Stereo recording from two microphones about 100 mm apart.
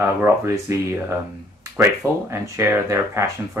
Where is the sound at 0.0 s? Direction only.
25° right (ahead or behind).